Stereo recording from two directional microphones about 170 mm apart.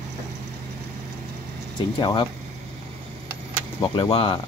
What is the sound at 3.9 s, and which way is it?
Speech, 30° left (ahead or behind).